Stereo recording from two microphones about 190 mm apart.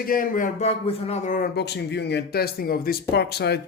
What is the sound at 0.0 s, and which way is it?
A man's voice, 45° left (ahead or behind).